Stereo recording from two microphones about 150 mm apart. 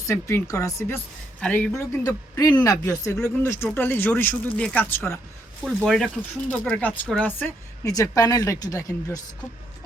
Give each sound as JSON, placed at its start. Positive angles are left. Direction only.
{"t": 0.0, "sound": "a woman's voice", "side_deg": 20}
{"t": 5.6, "sound": "a woman's voice", "side_deg": 0}
{"t": 7.9, "sound": "speech", "side_deg": 20}